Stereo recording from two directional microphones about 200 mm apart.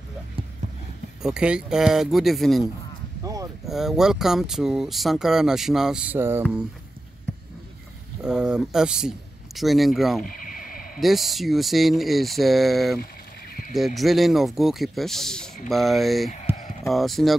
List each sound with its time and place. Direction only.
1.2 s speech: 5° right (ahead or behind)
3.6 s speech: centre (ahead or behind)
8.2 s speech: 5° right (ahead or behind)
10.2 s a sound: 45° left (ahead or behind)
11.0 s speech: centre (ahead or behind)